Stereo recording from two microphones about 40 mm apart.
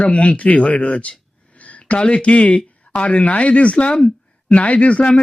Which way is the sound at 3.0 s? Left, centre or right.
Left.